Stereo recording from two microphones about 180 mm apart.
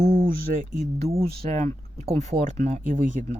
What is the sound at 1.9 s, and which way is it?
Speech, 40° right (ahead or behind).